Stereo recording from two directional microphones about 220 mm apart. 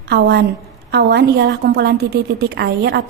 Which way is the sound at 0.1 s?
50° right (ahead or behind).